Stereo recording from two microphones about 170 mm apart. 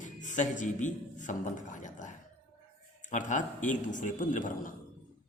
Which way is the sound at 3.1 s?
50° left (ahead or behind).